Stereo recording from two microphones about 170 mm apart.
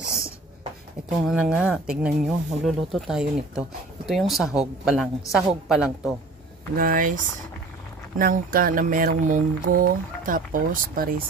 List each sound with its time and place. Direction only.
1.2 s speech: 5° right (ahead or behind)
6.7 s speech: 55° right (ahead or behind)
8.2 s speech: 60° right (ahead or behind)